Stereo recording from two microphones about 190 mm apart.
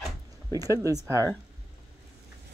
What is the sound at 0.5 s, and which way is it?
Speech, 15° right (ahead or behind).